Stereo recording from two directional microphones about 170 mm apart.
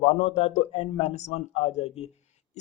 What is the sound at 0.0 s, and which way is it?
Speech, 40° left (ahead or behind).